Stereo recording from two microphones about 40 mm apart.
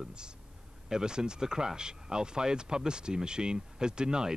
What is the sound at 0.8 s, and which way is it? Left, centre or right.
Speech, centre.